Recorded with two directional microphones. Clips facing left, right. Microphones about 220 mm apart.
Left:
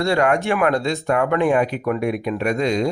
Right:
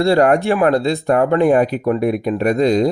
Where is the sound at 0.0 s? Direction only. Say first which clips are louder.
Right 5 dB; 35° right (ahead or behind).